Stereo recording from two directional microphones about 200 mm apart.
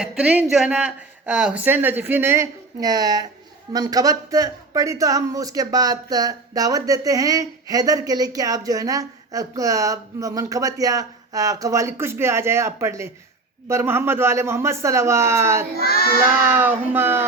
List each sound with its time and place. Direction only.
0.0 s speech: 5° right (ahead or behind)